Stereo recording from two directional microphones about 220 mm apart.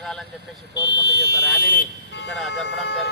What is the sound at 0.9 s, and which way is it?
Speech, 50° left (ahead or behind).